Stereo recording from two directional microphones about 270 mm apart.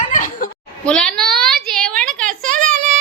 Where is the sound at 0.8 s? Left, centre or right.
Centre.